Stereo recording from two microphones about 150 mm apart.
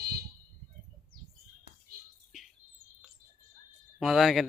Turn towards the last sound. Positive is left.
turn(degrees=0)  # may be behind; listen again after turning